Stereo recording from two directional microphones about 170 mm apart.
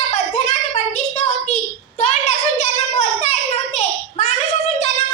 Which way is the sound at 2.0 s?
40° left (ahead or behind).